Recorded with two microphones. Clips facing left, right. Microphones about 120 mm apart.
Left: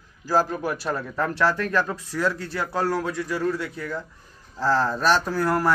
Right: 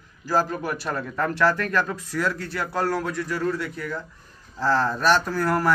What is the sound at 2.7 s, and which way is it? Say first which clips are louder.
Speech: even; 5° left (ahead or behind).